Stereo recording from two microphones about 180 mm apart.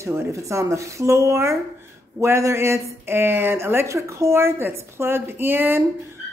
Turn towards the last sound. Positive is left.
turn(degrees=-10)  # may be behind; listen again after turning